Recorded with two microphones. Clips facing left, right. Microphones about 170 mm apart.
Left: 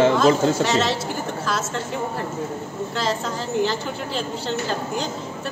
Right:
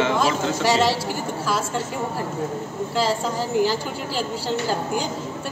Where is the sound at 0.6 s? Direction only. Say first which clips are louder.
Right 2 dB; 10° right (ahead or behind).